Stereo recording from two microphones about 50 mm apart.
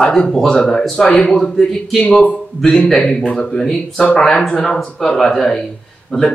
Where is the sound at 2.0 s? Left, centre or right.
Left.